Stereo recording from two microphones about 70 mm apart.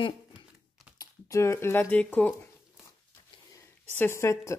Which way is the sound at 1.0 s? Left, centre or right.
Left.